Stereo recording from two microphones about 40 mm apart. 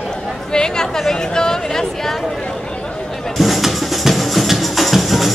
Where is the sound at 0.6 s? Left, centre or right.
Centre.